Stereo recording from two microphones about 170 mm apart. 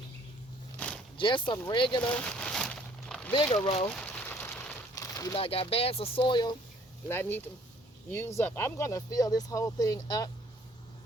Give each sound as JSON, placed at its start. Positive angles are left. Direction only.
{"t": 0.8, "sound": "a sound", "side_deg": 10}
{"t": 1.1, "sound": "speech", "side_deg": 30}
{"t": 2.0, "sound": "crumpling", "side_deg": 5}
{"t": 5.0, "sound": "crumpling", "side_deg": 20}
{"t": 5.4, "sound": "speech", "side_deg": 35}
{"t": 7.1, "sound": "speech", "side_deg": 15}